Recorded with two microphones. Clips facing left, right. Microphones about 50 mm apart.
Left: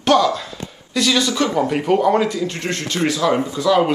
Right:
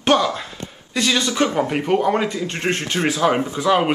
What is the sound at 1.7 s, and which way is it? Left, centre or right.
Speech, centre.